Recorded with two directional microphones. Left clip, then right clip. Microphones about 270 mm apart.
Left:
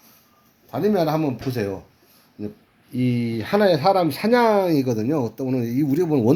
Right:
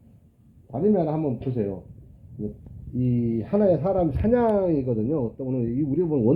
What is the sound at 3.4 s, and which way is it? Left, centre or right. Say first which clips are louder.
Speech: left 4 dB; left.